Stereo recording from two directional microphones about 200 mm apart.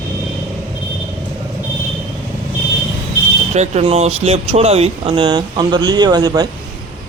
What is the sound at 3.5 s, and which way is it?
Speech, 35° right (ahead or behind).